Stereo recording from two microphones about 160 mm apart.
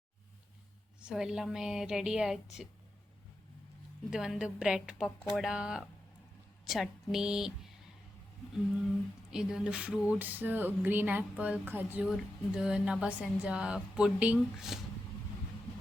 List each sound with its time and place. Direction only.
1.0 s speech: 5° right (ahead or behind)
4.1 s speech: 5° right (ahead or behind)
9.3 s a sound: 5° right (ahead or behind)
12.0 s speech: centre (ahead or behind)